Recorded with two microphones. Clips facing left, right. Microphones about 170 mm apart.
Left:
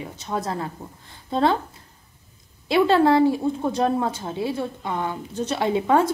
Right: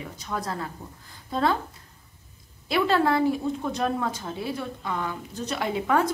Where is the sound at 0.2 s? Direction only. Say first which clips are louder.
Left 4 dB; 25° left (ahead or behind).